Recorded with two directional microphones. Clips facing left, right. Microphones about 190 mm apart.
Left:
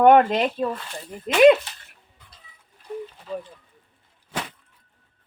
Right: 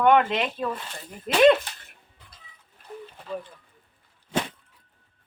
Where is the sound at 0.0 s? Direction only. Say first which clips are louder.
Left 5 dB; 40° left (ahead or behind).